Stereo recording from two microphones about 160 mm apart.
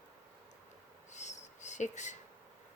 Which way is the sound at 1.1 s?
50° left (ahead or behind).